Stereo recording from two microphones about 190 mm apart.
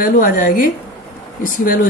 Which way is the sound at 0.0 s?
45° left (ahead or behind).